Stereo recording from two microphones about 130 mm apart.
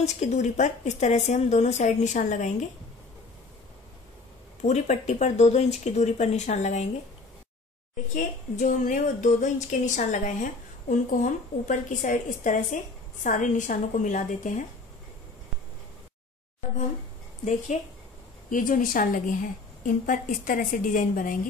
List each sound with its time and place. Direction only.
0.0 s a woman's voice: 60° left (ahead or behind)
4.6 s a woman's voice: 60° left (ahead or behind)
8.1 s a woman's voice: 80° left
17.7 s a woman's voice: 60° left (ahead or behind)
18.5 s a woman's voice: 90° left